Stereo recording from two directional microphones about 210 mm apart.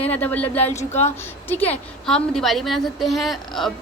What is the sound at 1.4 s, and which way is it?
A woman's voice, 10° left (ahead or behind).